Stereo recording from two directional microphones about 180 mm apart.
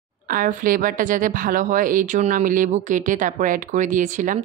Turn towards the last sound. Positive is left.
turn(degrees=-45)  # may be behind; listen again after turning